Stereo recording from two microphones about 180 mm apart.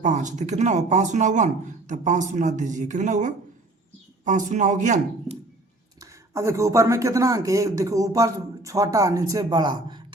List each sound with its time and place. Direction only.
0.0 s speech: 45° right (ahead or behind)
6.0 s speech: 15° right (ahead or behind)